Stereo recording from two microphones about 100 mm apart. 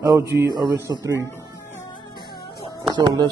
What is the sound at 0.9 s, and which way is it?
Speech, 35° right (ahead or behind).